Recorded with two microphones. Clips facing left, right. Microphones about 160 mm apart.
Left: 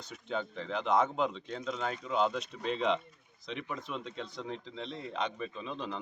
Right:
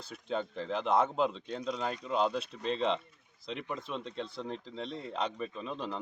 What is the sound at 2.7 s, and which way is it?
Speech, 35° right (ahead or behind).